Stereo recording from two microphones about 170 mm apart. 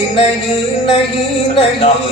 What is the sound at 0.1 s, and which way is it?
A man's voice, 35° left (ahead or behind).